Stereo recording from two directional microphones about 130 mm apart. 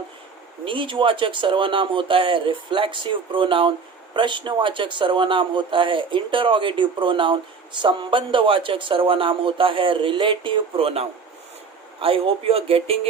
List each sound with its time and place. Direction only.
0.6 s speech: 40° right (ahead or behind)